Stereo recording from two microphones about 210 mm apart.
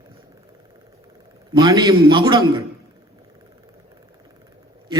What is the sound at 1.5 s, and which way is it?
A man's voice, 20° right (ahead or behind).